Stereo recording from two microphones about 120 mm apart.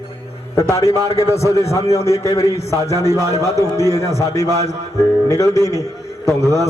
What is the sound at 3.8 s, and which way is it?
A man's voice, 25° left (ahead or behind).